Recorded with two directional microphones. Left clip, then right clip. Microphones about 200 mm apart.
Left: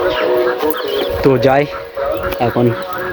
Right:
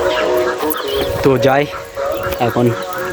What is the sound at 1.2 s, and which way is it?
Speech, centre (ahead or behind).